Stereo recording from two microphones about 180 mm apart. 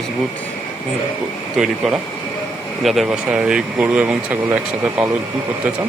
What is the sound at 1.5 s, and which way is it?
Speech, centre (ahead or behind).